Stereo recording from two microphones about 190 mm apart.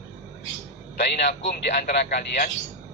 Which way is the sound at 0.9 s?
60° left (ahead or behind).